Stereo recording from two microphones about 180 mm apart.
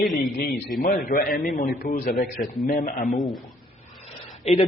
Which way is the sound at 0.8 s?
50° left (ahead or behind).